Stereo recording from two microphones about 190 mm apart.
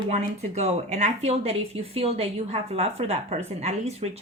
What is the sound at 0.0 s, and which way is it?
A woman's voice, 35° right (ahead or behind).